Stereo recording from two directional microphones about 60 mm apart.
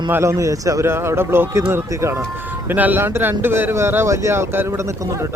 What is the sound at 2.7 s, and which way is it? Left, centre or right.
Speech, right.